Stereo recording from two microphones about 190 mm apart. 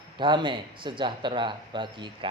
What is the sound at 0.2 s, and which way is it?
Speech, 25° right (ahead or behind).